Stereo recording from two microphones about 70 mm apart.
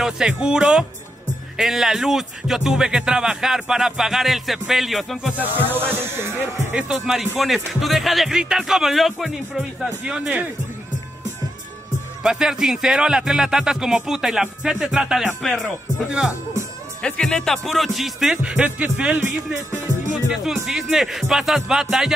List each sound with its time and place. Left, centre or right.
0.0 s speech: centre
5.4 s speech: right
6.9 s speech: centre
12.2 s speech: centre
15.4 s speech: centre
16.1 s speech: centre
17.0 s speech: centre
18.4 s speech: centre
20.4 s speech: centre